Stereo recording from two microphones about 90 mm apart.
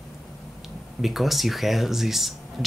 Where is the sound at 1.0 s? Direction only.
Centre (ahead or behind).